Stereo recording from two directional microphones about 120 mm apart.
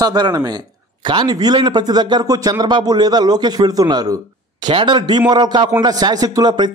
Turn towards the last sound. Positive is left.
turn(degrees=-35)  # may be behind; listen again after turning